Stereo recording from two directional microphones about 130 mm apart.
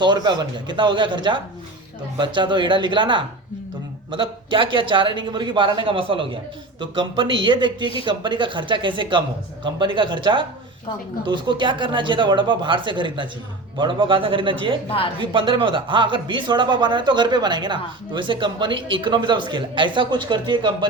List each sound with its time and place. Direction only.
0.0 s speech: 35° right (ahead or behind)
14.8 s a woman's voice: 45° left (ahead or behind)
15.2 s speech: 40° right (ahead or behind)